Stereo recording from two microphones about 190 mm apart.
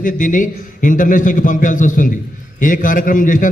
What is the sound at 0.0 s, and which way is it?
A man's voice, 45° left (ahead or behind).